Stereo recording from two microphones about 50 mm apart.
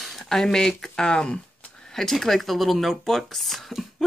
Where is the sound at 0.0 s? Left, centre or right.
Centre.